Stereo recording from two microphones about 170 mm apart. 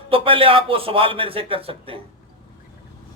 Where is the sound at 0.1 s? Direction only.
30° right (ahead or behind).